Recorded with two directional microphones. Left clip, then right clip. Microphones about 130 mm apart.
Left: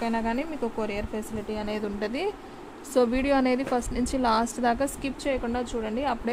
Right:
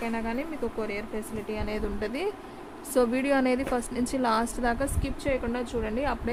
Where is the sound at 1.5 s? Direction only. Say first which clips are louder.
Left 2 dB; 20° left (ahead or behind).